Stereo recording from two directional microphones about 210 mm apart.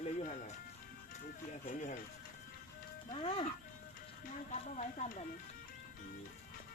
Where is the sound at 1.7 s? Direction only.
35° left (ahead or behind).